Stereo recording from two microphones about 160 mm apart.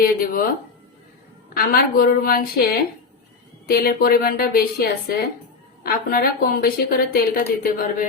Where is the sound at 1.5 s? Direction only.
70° left (ahead or behind).